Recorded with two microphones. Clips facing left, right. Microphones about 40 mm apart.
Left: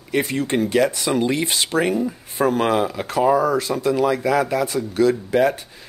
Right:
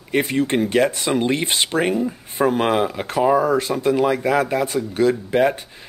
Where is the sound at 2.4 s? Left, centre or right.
Right.